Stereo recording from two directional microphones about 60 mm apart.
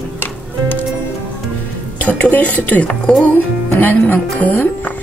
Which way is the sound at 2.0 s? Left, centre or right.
Left.